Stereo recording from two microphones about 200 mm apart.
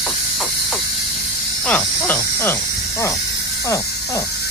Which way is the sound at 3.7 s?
15° left (ahead or behind).